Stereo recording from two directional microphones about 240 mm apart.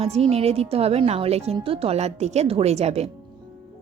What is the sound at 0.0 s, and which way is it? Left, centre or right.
Speech, right.